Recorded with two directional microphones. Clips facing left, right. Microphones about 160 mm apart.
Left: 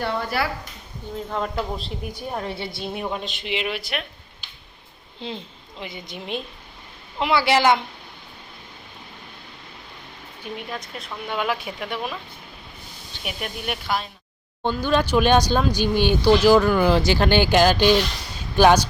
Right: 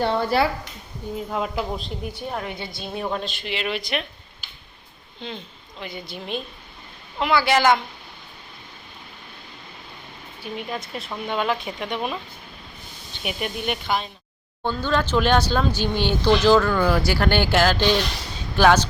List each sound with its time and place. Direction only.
0.0 s speech: 25° right (ahead or behind)
1.3 s speech: 5° right (ahead or behind)
2.4 s a woman's voice: 30° left (ahead or behind)
3.0 s speech: 15° left (ahead or behind)
5.8 s a woman's voice: 25° left (ahead or behind)
10.4 s speech: 10° right (ahead or behind)
11.3 s speech: 10° left (ahead or behind)
13.2 s speech: centre (ahead or behind)
14.6 s speech: 15° left (ahead or behind)